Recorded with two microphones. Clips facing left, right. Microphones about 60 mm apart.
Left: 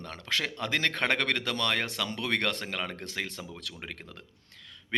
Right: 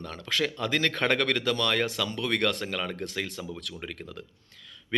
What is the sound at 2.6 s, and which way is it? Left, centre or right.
Speech, left.